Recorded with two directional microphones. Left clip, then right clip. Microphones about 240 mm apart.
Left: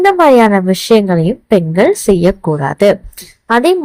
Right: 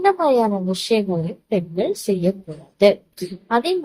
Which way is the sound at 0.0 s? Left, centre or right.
Left.